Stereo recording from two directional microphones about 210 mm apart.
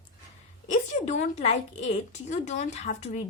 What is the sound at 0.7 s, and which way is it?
A woman's voice, 35° left (ahead or behind).